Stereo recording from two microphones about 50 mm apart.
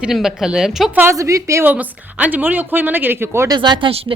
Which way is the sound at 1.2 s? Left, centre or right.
Right.